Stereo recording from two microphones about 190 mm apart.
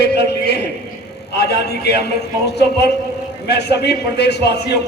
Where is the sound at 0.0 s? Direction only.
60° left (ahead or behind).